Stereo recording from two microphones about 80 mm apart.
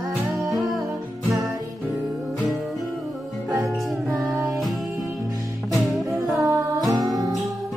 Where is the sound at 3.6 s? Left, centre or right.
Centre.